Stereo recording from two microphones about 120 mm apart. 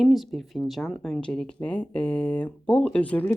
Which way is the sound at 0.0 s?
Centre (ahead or behind).